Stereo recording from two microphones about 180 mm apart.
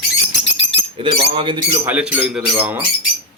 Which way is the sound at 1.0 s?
30° right (ahead or behind).